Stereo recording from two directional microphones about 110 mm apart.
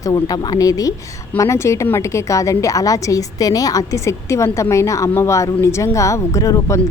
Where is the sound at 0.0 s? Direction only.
35° left (ahead or behind).